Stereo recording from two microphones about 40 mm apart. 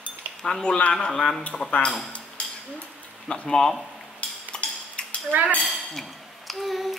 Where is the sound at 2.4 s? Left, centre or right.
Left.